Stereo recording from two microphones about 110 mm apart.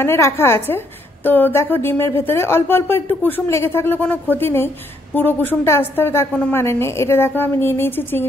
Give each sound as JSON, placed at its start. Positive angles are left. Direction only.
{"t": 0.0, "sound": "a woman's voice", "side_deg": 20}